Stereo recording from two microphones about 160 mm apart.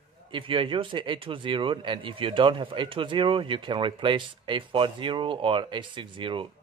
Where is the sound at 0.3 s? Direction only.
35° right (ahead or behind).